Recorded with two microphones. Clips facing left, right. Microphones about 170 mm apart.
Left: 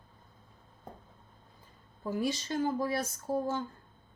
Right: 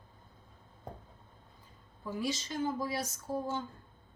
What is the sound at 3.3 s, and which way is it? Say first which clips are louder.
Speech: left 4 dB; 45° left (ahead or behind).